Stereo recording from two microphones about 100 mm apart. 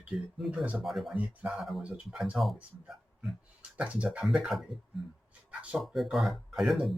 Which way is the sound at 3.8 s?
10° right (ahead or behind).